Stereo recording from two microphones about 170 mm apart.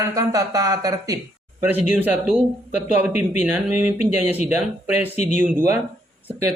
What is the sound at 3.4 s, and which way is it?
Speech, 10° right (ahead or behind).